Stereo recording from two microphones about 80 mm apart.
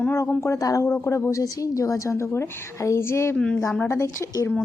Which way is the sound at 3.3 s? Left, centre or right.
Centre.